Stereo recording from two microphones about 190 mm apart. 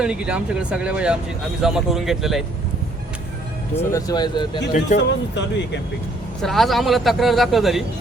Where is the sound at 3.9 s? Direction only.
20° left (ahead or behind).